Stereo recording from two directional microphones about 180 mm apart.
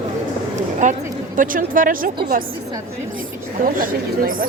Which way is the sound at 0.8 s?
45° right (ahead or behind).